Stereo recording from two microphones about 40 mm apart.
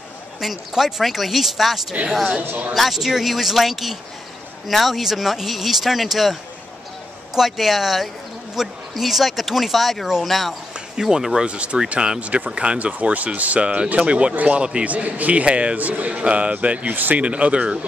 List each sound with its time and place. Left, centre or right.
0.4 s speech: centre
7.3 s speech: centre
11.0 s speech: centre
11.4 s speech: right
12.2 s speech: right
14.3 s speech: right
14.6 s speech: right
14.9 s speech: right
16.8 s speech: right
17.2 s speech: right